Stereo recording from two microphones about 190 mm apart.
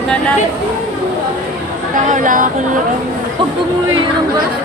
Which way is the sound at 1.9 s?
45° right (ahead or behind).